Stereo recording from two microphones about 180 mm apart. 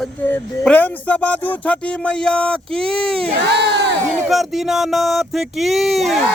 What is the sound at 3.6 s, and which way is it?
Choir, 70° right (ahead or behind).